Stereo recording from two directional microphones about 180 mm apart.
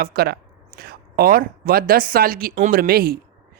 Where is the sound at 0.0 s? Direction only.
55° right (ahead or behind).